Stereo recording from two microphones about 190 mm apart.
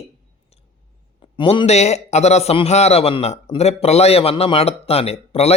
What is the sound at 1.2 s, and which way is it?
A man's voice, 25° left (ahead or behind).